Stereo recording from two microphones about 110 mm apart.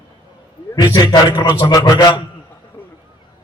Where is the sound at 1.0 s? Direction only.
40° left (ahead or behind).